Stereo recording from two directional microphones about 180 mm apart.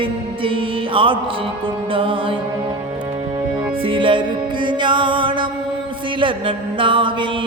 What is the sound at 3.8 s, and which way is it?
Music, 30° right (ahead or behind).